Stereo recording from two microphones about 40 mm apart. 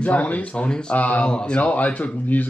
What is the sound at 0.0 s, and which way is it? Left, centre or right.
Speech, left.